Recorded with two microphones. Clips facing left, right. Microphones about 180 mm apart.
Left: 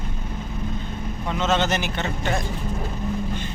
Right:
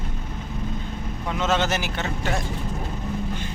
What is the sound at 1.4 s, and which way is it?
Speech, 5° right (ahead or behind).